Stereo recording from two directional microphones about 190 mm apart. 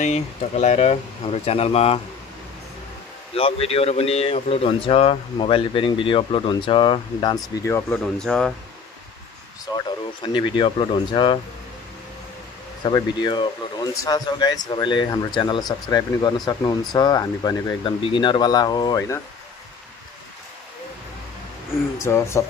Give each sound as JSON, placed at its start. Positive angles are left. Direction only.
{"t": 0.0, "sound": "speech", "side_deg": 35}
{"t": 3.3, "sound": "speech", "side_deg": 30}
{"t": 9.8, "sound": "speech", "side_deg": 25}
{"t": 12.8, "sound": "speech", "side_deg": 25}
{"t": 22.0, "sound": "speech", "side_deg": 15}